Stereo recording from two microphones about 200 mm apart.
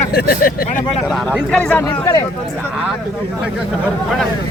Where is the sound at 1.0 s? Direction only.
Centre (ahead or behind).